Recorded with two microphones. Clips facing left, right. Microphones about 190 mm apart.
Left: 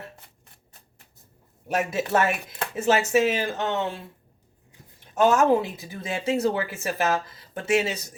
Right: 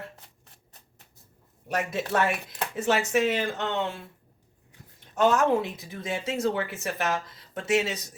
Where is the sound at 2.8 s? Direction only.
30° left (ahead or behind).